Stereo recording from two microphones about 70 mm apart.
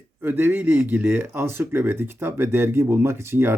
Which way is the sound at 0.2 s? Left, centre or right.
Right.